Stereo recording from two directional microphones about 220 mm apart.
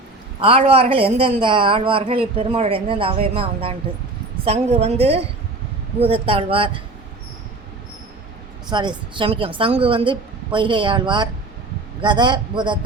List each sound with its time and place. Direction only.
0.3 s a woman's voice: 25° right (ahead or behind)
8.7 s a woman's voice: 20° right (ahead or behind)